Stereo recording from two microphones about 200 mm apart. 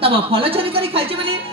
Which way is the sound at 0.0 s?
30° right (ahead or behind).